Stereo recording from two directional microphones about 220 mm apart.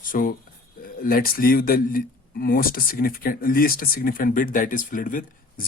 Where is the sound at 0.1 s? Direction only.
40° left (ahead or behind).